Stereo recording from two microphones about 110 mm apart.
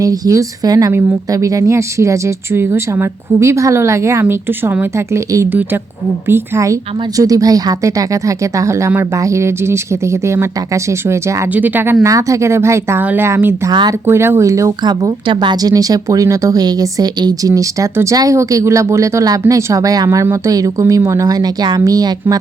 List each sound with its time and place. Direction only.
0.0 s speech: 30° right (ahead or behind)
12.0 s speech: 30° right (ahead or behind)
13.7 s speech: 40° right (ahead or behind)
14.1 s speech: 25° right (ahead or behind)
14.8 s speech: 40° right (ahead or behind)